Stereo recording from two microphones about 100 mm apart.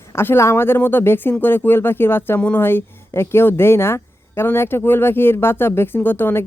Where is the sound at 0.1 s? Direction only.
25° left (ahead or behind).